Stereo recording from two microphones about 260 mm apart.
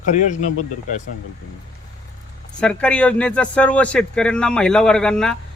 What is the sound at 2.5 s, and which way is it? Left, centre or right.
Speech, centre.